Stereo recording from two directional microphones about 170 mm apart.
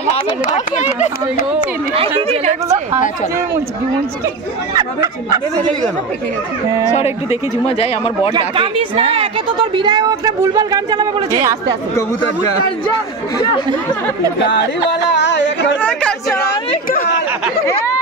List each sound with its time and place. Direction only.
0.5 s speech: 45° left (ahead or behind)
4.7 s speech: 20° right (ahead or behind)
6.9 s speech: 35° left (ahead or behind)
8.3 s speech: 30° right (ahead or behind)
9.8 s speech: 25° right (ahead or behind)
14.5 s speech: 90° left
15.8 s speech: 5° left (ahead or behind)
16.4 s chatter: 55° left (ahead or behind)